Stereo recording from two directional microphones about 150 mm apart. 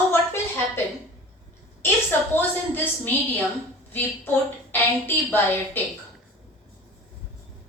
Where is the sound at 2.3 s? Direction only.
10° left (ahead or behind).